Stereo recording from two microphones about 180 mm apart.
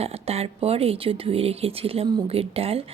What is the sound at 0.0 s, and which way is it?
Speech, 35° right (ahead or behind).